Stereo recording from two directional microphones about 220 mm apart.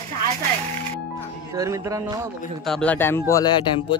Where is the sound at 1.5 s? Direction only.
15° right (ahead or behind).